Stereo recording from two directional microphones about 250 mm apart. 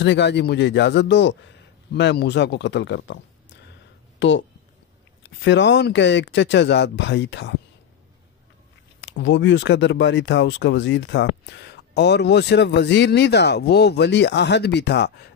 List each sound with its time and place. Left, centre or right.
0.0 s speech: left
4.2 s speech: left
9.0 s speech: left